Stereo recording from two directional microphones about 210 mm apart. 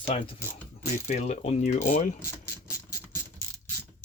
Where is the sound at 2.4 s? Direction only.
15° left (ahead or behind).